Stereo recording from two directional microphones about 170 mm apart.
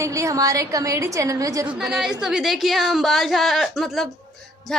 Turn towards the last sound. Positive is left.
turn(degrees=0)  # may be behind; listen again after turning